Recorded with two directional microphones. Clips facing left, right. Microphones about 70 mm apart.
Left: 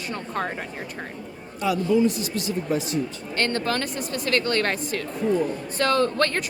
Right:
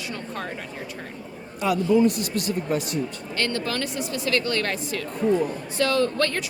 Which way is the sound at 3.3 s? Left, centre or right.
Left.